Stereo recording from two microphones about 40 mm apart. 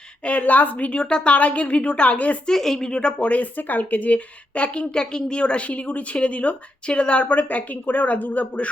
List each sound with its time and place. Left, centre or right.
0.3 s a woman's voice: left
2.5 s a woman's voice: centre
3.2 s a woman's voice: left